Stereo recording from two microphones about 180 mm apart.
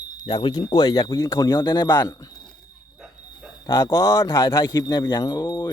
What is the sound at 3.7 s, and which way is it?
Speech, 25° left (ahead or behind).